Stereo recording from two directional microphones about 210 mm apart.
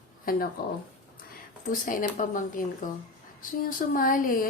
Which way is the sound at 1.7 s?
40° left (ahead or behind).